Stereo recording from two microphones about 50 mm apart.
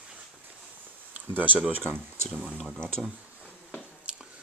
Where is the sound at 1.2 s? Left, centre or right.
Right.